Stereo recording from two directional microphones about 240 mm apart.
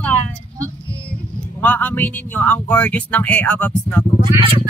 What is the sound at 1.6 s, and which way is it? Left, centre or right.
Speech, centre.